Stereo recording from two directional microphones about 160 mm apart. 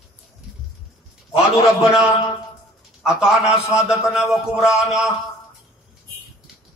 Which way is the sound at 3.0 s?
5° right (ahead or behind).